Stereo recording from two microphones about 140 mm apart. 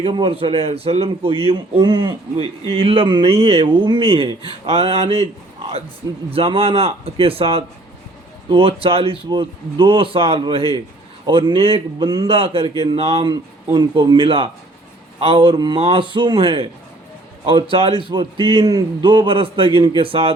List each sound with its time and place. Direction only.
0.0 s speech: 35° right (ahead or behind)
1.8 s a man's voice: 30° right (ahead or behind)
2.6 s speech: 40° right (ahead or behind)
6.3 s speech: 40° right (ahead or behind)
12.0 s speech: 30° right (ahead or behind)
13.2 s speech: 30° right (ahead or behind)